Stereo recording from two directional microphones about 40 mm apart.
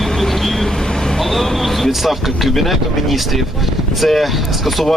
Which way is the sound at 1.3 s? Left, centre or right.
Centre.